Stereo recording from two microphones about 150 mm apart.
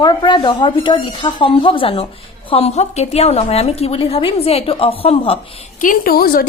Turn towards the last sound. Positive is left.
turn(degrees=80)